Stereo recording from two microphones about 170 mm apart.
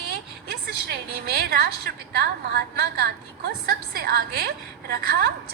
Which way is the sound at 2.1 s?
70° right (ahead or behind).